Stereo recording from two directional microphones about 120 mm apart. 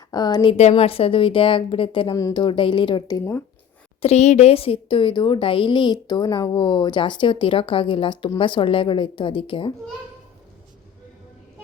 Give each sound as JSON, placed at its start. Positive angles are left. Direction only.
{"t": 0.1, "sound": "speech", "side_deg": 35}
{"t": 0.5, "sound": "a woman's voice", "side_deg": 60}
{"t": 4.0, "sound": "a woman's voice", "side_deg": 65}